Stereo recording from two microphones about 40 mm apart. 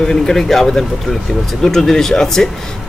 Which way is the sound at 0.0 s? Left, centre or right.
Centre.